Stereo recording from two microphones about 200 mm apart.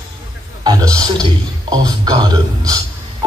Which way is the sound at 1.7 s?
20° right (ahead or behind).